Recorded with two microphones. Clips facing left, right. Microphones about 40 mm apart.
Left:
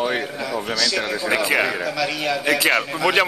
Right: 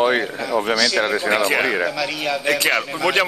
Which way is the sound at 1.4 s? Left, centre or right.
Centre.